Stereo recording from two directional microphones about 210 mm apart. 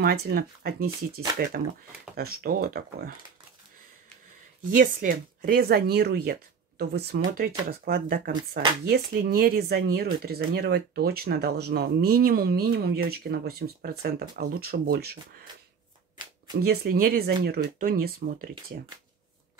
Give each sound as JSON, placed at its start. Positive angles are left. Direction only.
{"t": 0.0, "sound": "speech", "side_deg": -50}
{"t": 2.1, "sound": "speech", "side_deg": -45}
{"t": 4.7, "sound": "speech", "side_deg": -40}
{"t": 16.6, "sound": "speech", "side_deg": -45}